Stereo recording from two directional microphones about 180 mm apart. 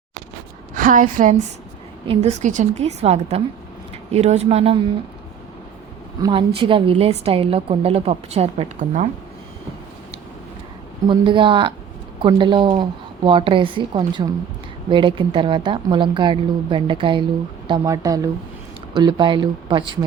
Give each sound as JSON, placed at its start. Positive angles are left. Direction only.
{"t": 0.8, "sound": "a woman's voice", "side_deg": -45}
{"t": 6.2, "sound": "a woman's voice", "side_deg": -30}
{"t": 11.1, "sound": "a woman's voice", "side_deg": -25}